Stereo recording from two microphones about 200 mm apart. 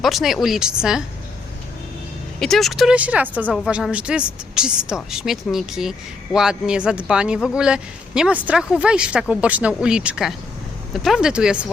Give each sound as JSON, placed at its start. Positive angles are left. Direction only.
{"t": 0.0, "sound": "speech", "side_deg": 0}
{"t": 2.4, "sound": "speech", "side_deg": 0}